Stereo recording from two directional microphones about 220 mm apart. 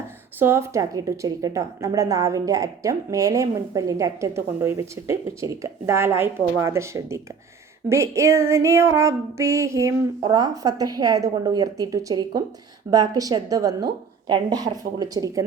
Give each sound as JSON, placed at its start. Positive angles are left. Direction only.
{"t": 0.3, "sound": "a woman's voice", "side_deg": -10}